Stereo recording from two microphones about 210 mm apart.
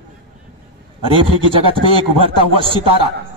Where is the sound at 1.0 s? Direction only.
25° right (ahead or behind).